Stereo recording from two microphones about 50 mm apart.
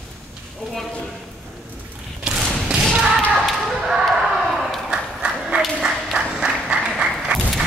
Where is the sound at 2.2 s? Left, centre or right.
Right.